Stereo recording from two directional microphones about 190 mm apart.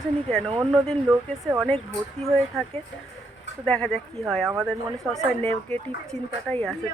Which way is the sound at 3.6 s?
5° left (ahead or behind).